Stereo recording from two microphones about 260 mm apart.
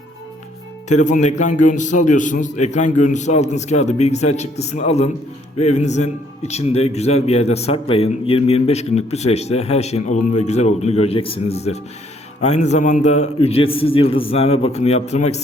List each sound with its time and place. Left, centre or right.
0.9 s a man's voice: left